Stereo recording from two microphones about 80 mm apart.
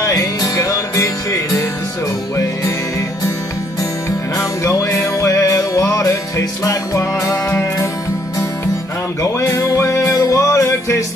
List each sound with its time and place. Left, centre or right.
0.0 s music: left
4.4 s music: left
5.9 s music: left
6.3 s music: left
9.2 s music: left